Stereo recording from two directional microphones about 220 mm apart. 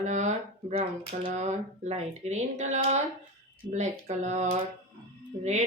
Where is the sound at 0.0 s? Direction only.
30° right (ahead or behind).